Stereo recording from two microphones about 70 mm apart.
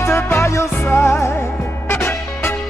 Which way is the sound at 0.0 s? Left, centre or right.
Left.